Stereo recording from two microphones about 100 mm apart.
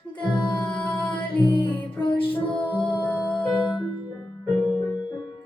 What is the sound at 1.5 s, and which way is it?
Music, 55° left (ahead or behind).